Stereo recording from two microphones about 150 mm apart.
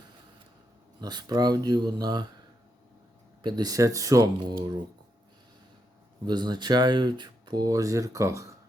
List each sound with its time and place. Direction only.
1.0 s speech: 25° right (ahead or behind)
3.4 s speech: 25° right (ahead or behind)
6.2 s speech: 30° right (ahead or behind)